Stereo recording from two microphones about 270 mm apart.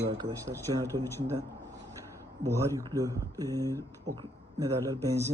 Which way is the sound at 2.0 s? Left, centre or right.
Centre.